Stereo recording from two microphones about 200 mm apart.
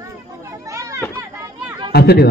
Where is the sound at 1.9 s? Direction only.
55° left (ahead or behind).